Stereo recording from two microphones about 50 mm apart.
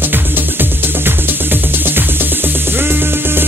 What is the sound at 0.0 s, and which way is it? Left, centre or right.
Music, right.